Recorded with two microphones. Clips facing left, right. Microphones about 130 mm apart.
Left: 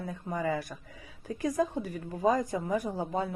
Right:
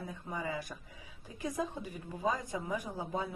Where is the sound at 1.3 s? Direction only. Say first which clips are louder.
Left 8 dB; 70° left (ahead or behind).